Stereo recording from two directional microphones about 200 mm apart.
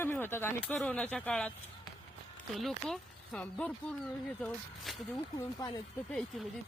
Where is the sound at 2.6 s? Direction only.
Centre (ahead or behind).